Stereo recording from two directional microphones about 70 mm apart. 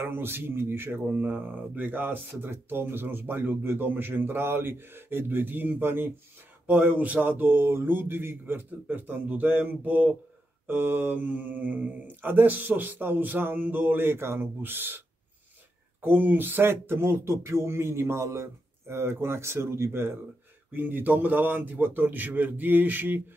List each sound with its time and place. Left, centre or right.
0.0 s speech: right